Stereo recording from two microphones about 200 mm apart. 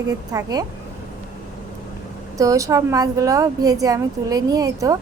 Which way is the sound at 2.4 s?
15° right (ahead or behind).